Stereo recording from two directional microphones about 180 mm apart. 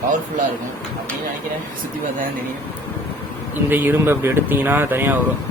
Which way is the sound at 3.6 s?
10° right (ahead or behind).